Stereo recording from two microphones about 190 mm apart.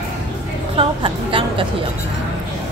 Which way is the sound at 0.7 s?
30° right (ahead or behind).